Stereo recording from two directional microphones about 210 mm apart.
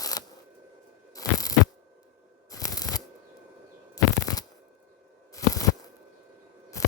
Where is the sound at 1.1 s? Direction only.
15° left (ahead or behind).